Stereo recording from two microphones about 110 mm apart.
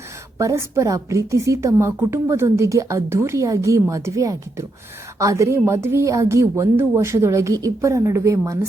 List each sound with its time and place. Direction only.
0.3 s a woman's voice: 30° right (ahead or behind)